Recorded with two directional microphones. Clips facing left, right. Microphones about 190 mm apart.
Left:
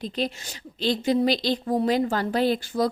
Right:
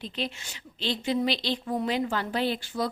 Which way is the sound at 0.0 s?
40° left (ahead or behind).